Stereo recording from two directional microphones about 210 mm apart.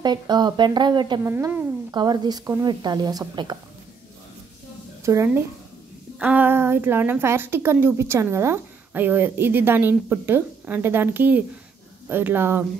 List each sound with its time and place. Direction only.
0.0 s speech: 20° right (ahead or behind)
5.0 s a woman's voice: 15° right (ahead or behind)